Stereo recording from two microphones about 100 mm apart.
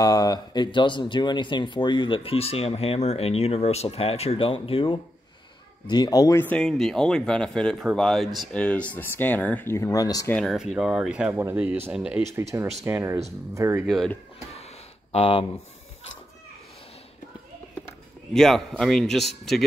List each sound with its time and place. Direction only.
0.0 s speech: 40° left (ahead or behind); by 5.0 s 60° left (ahead or behind)
5.9 s speech: 45° left (ahead or behind)
6.3 s speech: 20° left (ahead or behind)
6.6 s a man's voice: 5° left (ahead or behind)
8.5 s speech: 10° left (ahead or behind)
9.8 s speech: 35° left (ahead or behind)
10.4 s speech: 5° right (ahead or behind)
12.4 s speech: 25° right (ahead or behind)
13.8 s a man's voice: 5° left (ahead or behind)
14.5 s a sound: 90° left; by 15.4 s 75° left (ahead or behind)
18.3 s a man's voice: 5° left (ahead or behind)